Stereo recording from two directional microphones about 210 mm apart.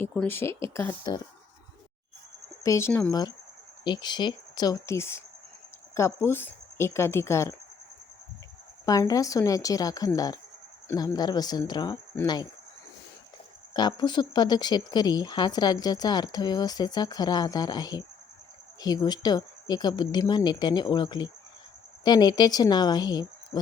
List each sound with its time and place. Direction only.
0.0 s a woman's voice: 10° left (ahead or behind)
2.6 s a woman's voice: 10° left (ahead or behind)
8.9 s a woman's voice: 15° left (ahead or behind)
13.7 s speech: 20° left (ahead or behind)